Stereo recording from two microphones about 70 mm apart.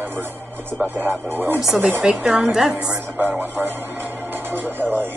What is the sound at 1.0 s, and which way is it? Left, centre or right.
Speech, right.